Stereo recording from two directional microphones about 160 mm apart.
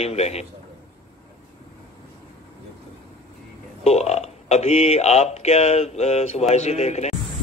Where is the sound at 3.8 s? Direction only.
40° left (ahead or behind).